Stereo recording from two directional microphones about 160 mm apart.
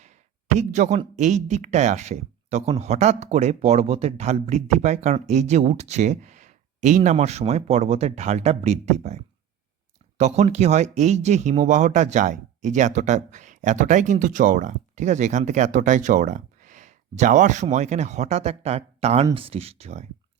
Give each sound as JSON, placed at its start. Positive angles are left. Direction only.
{"t": 0.6, "sound": "speech", "side_deg": -45}